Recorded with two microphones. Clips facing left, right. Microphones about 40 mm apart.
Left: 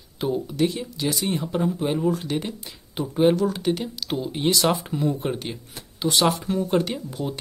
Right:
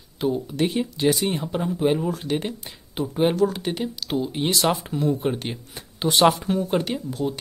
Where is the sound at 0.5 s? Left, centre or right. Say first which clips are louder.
Right 1 dB; right.